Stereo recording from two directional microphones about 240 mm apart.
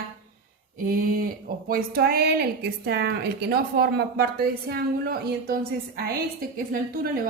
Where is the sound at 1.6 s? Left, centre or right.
Right.